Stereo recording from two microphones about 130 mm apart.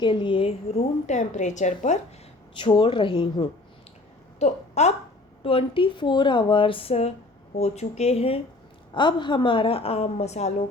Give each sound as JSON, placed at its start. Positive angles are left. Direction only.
{"t": 0.0, "sound": "a woman's voice", "side_deg": 35}
{"t": 2.6, "sound": "speech", "side_deg": 40}
{"t": 4.4, "sound": "speech", "side_deg": 60}
{"t": 5.4, "sound": "a woman's voice", "side_deg": 45}
{"t": 8.9, "sound": "a woman's voice", "side_deg": 35}